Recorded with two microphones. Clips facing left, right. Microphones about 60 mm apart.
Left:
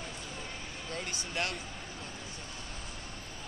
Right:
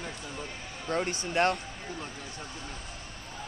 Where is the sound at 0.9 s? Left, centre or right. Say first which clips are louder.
Right 10 dB; right.